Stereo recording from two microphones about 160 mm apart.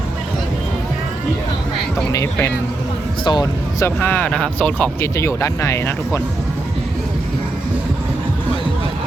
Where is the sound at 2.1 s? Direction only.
15° left (ahead or behind).